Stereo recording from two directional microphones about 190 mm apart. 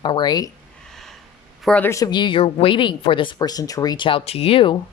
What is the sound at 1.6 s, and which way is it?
Speech, 5° left (ahead or behind).